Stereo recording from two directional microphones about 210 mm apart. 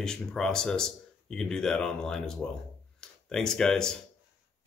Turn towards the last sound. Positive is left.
turn(degrees=5)  # may be behind; listen again after turning